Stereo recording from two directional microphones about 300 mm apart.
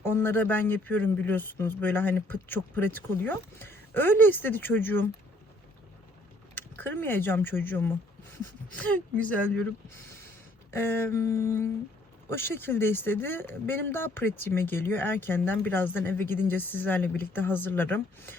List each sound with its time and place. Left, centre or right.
0.0 s speech: centre
6.5 s speech: centre
10.7 s speech: centre